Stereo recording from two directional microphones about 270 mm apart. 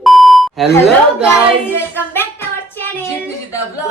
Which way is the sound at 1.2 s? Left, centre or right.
Centre.